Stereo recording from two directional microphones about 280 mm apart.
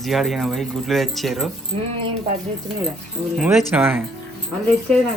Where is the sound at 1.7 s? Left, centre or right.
Centre.